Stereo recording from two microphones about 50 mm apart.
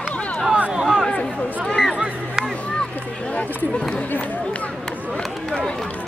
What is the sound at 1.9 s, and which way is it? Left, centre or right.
Music, centre.